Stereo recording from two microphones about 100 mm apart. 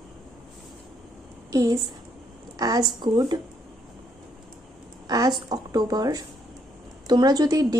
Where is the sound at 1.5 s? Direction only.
40° right (ahead or behind).